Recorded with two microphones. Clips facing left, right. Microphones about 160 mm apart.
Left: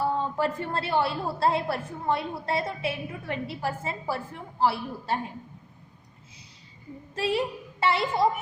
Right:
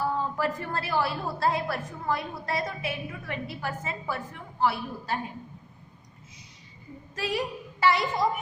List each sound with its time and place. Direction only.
0.0 s a woman's voice: 30° left (ahead or behind)
7.2 s a woman's voice: 30° left (ahead or behind)